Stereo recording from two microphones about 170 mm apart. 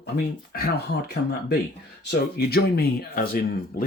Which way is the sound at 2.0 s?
65° left (ahead or behind).